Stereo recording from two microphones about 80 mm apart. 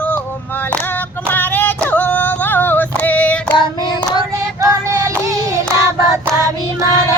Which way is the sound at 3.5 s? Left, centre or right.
Left.